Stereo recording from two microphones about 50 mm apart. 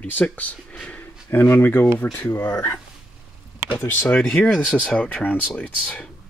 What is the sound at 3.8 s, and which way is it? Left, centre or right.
Speech, left.